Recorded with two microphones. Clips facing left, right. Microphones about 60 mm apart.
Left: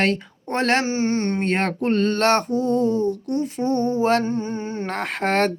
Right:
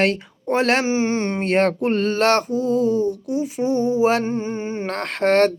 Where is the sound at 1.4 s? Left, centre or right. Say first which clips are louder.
Right 4 dB; centre.